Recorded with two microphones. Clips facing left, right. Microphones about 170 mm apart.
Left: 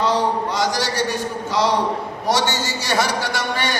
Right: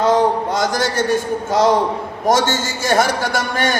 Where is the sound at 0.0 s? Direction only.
50° right (ahead or behind).